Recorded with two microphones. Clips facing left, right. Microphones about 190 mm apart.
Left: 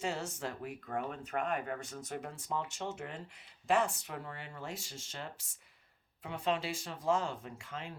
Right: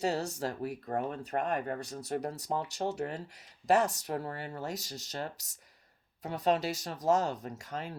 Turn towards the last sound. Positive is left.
turn(degrees=-40)  # may be behind; listen again after turning